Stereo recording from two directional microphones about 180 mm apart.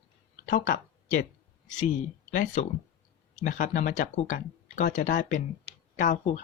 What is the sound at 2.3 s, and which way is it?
Speech, 45° left (ahead or behind).